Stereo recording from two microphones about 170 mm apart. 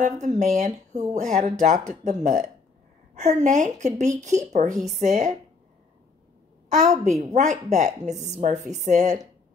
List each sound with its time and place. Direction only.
0.2 s a woman's voice: 45° right (ahead or behind)
6.8 s a woman's voice: 45° right (ahead or behind)